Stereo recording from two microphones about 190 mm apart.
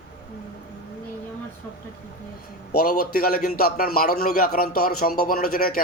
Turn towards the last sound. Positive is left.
turn(degrees=50)  # may be behind; listen again after turning